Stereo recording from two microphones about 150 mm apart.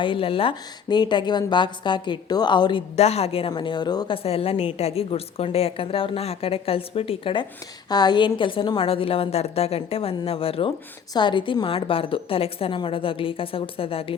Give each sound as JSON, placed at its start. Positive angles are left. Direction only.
{"t": 0.0, "sound": "a woman's voice", "side_deg": 35}
{"t": 2.9, "sound": "a woman's voice", "side_deg": 45}
{"t": 4.2, "sound": "a woman's voice", "side_deg": 40}
{"t": 7.9, "sound": "a woman's voice", "side_deg": 25}